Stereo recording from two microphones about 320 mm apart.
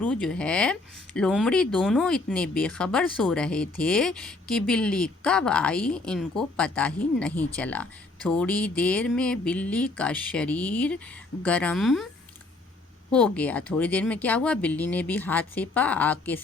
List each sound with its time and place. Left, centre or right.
0.0 s speech: centre
13.1 s speech: centre